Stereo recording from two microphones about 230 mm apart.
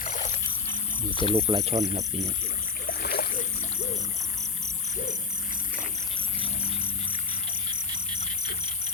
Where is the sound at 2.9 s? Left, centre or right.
Left.